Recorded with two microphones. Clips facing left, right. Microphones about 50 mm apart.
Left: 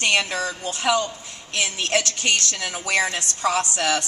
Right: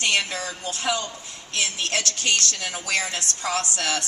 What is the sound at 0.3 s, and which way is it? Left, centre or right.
A woman's voice, left.